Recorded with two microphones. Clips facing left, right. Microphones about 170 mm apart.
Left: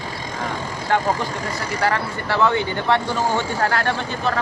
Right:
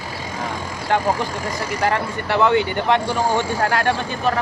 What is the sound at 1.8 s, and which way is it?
Speech, 20° right (ahead or behind).